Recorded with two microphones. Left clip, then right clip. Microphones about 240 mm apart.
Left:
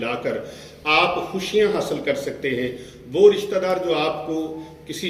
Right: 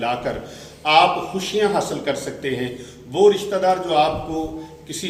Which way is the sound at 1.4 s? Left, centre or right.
Centre.